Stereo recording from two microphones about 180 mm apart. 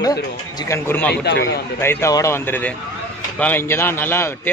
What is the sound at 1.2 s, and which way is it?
Speech, 70° left (ahead or behind).